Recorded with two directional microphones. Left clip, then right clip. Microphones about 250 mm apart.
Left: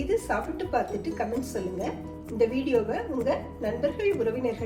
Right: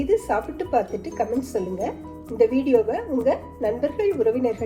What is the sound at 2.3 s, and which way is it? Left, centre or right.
Speech, right.